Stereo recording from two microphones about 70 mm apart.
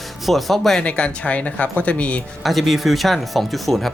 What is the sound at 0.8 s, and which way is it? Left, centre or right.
Speech, centre.